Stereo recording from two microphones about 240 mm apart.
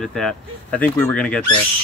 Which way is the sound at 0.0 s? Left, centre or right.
Centre.